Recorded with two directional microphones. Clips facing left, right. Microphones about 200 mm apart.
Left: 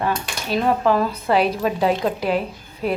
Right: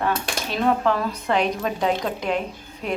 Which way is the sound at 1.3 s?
5° left (ahead or behind).